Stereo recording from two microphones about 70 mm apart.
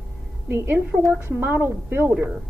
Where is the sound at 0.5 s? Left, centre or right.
Right.